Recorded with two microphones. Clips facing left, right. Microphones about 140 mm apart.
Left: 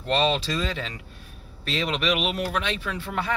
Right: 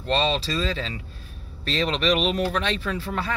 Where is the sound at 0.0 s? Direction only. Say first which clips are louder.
Even; 20° left (ahead or behind).